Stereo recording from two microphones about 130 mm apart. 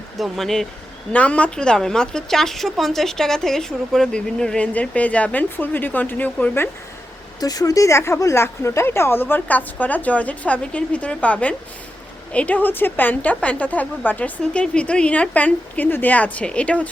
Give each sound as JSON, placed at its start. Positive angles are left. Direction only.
{"t": 0.2, "sound": "speech", "side_deg": 0}
{"t": 7.3, "sound": "speech", "side_deg": 30}